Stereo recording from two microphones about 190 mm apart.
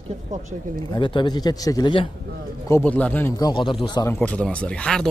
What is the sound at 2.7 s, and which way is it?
Speech, 10° left (ahead or behind).